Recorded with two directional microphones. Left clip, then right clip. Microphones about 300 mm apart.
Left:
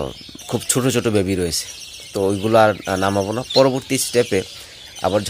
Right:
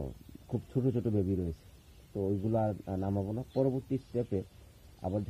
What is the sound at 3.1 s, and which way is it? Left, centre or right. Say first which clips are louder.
Speech: left 16 dB; left.